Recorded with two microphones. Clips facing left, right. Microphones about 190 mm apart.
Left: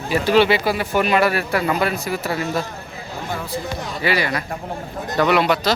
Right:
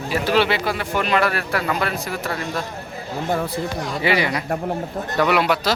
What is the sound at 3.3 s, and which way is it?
Speech, 60° right (ahead or behind).